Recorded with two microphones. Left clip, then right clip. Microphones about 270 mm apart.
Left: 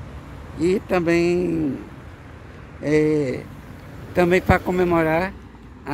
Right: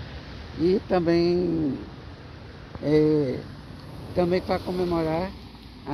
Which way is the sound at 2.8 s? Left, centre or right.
Centre.